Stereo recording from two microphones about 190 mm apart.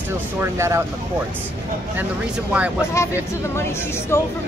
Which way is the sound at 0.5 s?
15° right (ahead or behind).